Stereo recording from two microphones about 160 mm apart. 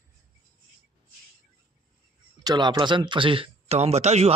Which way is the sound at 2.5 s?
25° right (ahead or behind).